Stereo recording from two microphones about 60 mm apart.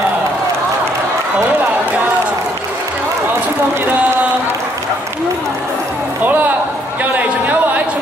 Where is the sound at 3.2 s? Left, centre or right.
Right.